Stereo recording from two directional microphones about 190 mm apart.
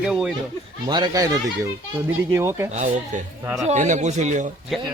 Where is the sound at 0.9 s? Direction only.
20° right (ahead or behind).